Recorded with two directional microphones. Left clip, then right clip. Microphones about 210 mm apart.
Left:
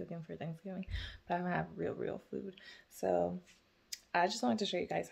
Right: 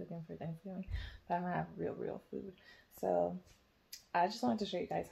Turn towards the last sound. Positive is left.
turn(degrees=20)  # may be behind; listen again after turning